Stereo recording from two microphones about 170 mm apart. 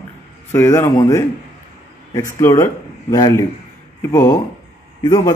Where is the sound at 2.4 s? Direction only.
15° left (ahead or behind).